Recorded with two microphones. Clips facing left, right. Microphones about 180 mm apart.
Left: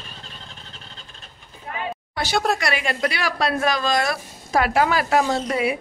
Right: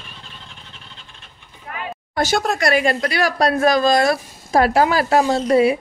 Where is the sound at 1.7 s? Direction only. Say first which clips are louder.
Even; 25° left (ahead or behind).